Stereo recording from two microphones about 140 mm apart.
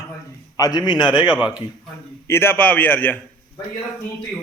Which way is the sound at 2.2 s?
15° left (ahead or behind).